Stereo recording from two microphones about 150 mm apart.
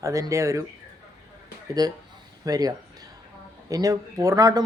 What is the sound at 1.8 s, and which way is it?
Speech, 25° right (ahead or behind).